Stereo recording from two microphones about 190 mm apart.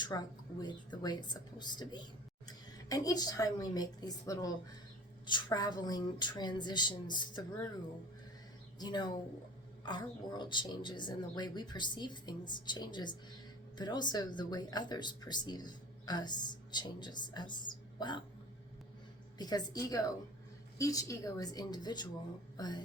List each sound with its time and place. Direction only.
0.6 s a woman's voice: 20° left (ahead or behind)
8.8 s a woman's voice: 20° left (ahead or behind)
19.4 s a woman's voice: 20° left (ahead or behind)